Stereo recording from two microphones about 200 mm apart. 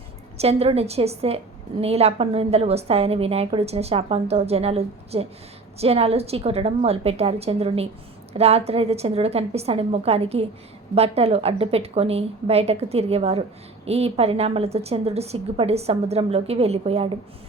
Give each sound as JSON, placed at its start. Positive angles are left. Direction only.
{"t": 0.3, "sound": "a woman's voice", "side_deg": -30}